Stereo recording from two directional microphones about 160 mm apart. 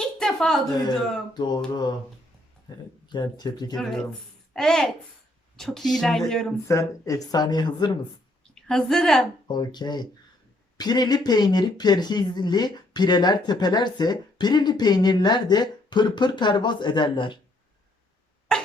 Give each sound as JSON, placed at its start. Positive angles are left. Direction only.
{"t": 0.0, "sound": "a sound", "side_deg": 5}
{"t": 1.3, "sound": "speech", "side_deg": 25}
{"t": 3.8, "sound": "speech", "side_deg": 5}
{"t": 6.7, "sound": "speech", "side_deg": 20}
{"t": 8.5, "sound": "a woman's voice", "side_deg": 5}
{"t": 9.5, "sound": "speech", "side_deg": 25}